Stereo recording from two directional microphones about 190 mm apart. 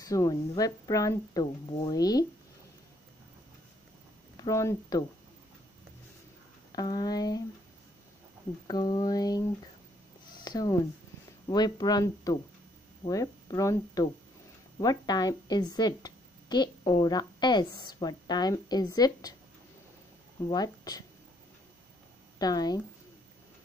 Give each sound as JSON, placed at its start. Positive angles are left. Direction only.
{"t": 0.0, "sound": "a woman's voice", "side_deg": 20}
{"t": 4.4, "sound": "speech", "side_deg": 15}
{"t": 6.7, "sound": "a woman's voice", "side_deg": 20}
{"t": 8.6, "sound": "a woman's voice", "side_deg": 20}
{"t": 10.4, "sound": "a woman's voice", "side_deg": 20}
{"t": 20.4, "sound": "a woman's voice", "side_deg": 20}
{"t": 22.4, "sound": "a woman's voice", "side_deg": 20}